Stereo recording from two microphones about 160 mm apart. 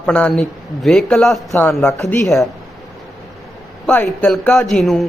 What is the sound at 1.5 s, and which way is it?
Speech, 15° left (ahead or behind).